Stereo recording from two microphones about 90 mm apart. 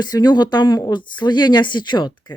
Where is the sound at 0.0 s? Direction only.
50° left (ahead or behind).